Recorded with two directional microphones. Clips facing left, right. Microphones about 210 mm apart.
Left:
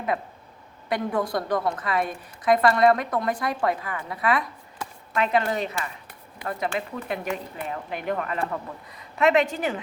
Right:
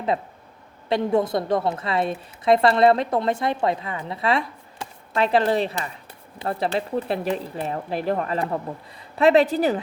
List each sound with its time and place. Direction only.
0.9 s a woman's voice: 25° right (ahead or behind)